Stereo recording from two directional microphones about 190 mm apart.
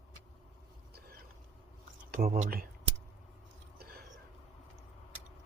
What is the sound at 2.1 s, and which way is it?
Speech, 50° right (ahead or behind).